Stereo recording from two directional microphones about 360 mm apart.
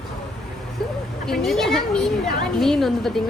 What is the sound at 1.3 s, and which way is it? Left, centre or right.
Speech, centre.